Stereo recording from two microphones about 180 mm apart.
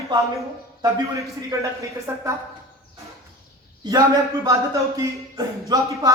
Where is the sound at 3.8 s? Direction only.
25° right (ahead or behind).